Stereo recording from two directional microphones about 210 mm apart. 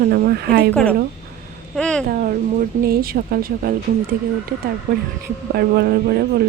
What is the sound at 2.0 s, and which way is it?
Speech, 40° right (ahead or behind).